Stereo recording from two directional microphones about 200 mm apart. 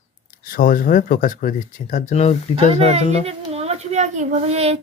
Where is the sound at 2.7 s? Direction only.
30° right (ahead or behind).